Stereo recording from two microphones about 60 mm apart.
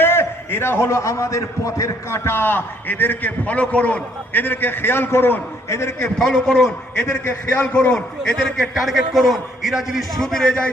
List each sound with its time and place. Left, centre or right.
0.0 s a man's voice: left
4.3 s a man's voice: left
6.1 s a man's voice: centre
7.3 s a man's voice: left
7.9 s a man's voice: centre
8.8 s a man's voice: centre
10.2 s a man's voice: centre